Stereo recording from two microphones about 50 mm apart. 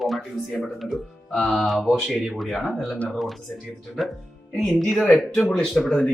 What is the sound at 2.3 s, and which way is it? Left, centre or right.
Speech, centre.